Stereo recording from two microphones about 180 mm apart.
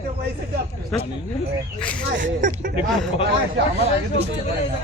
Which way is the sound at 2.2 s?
50° right (ahead or behind).